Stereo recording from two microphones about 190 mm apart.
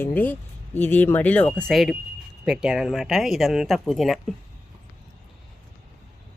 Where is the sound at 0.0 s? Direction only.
10° left (ahead or behind).